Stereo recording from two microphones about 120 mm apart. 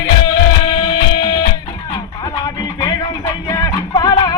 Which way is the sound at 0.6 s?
40° left (ahead or behind).